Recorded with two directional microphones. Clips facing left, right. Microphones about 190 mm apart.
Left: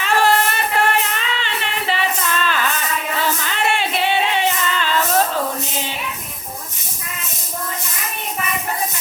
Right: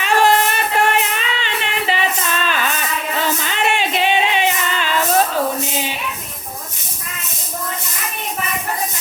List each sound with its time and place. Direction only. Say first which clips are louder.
0.0 s music: right 2 dB; 20° right (ahead or behind)
2.4 s a sound: right 1 dB; 15° right (ahead or behind)
3.2 s music: right 2 dB; 20° right (ahead or behind)